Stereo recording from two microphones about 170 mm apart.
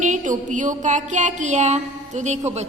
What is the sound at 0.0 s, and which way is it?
Music, 45° right (ahead or behind).